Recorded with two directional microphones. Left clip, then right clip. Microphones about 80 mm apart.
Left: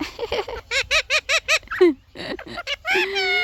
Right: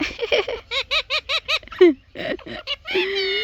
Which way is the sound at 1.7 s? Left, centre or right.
Centre.